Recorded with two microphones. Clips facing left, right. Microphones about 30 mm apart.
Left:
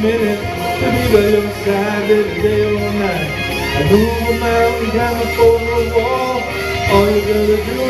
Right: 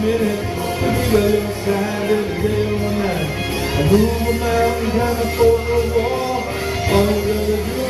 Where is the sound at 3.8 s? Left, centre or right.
Centre.